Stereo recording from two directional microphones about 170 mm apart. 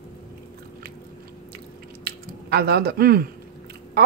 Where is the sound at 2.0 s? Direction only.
65° right (ahead or behind).